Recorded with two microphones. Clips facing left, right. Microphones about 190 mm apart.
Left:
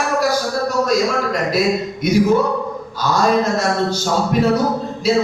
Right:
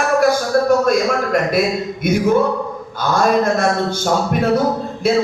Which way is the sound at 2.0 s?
55° right (ahead or behind).